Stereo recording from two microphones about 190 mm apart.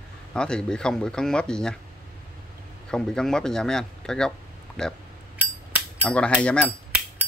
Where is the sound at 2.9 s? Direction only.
5° left (ahead or behind).